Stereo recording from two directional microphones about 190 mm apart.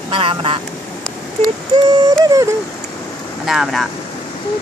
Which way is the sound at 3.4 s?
Centre (ahead or behind).